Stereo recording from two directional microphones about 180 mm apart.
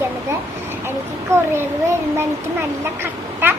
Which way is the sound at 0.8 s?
15° right (ahead or behind).